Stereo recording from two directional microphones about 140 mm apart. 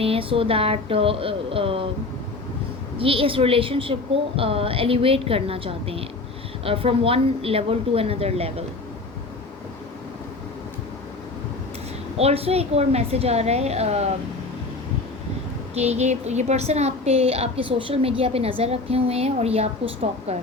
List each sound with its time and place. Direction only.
0.0 s a woman's voice: 40° right (ahead or behind)
3.0 s a woman's voice: 40° right (ahead or behind)
12.1 s a woman's voice: 45° right (ahead or behind)
15.7 s a woman's voice: 50° right (ahead or behind)